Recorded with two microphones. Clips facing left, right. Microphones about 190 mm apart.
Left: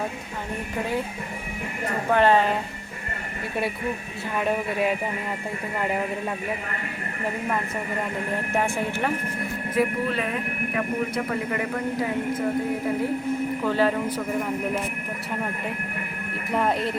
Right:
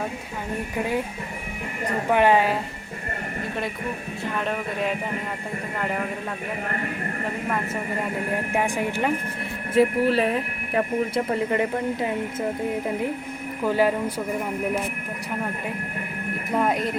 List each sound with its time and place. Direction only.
2.0 s speech: 15° right (ahead or behind)
4.4 s speech: 10° left (ahead or behind)
8.5 s speech: 15° right (ahead or behind)
9.7 s speech: 30° right (ahead or behind)
13.7 s speech: 10° right (ahead or behind)
16.5 s speech: 5° right (ahead or behind)